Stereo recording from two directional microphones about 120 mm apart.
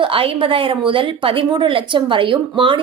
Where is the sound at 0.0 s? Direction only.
50° right (ahead or behind).